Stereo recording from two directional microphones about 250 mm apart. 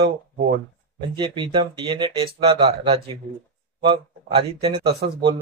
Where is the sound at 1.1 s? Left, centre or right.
Centre.